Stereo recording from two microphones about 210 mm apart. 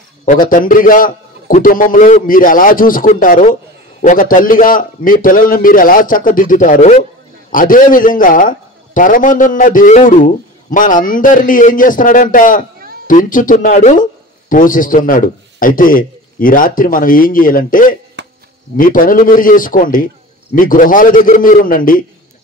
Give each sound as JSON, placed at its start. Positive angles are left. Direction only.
{"t": 0.2, "sound": "a man's voice", "side_deg": 40}
{"t": 18.2, "sound": "a sound", "side_deg": -55}
{"t": 18.8, "sound": "a man's voice", "side_deg": 40}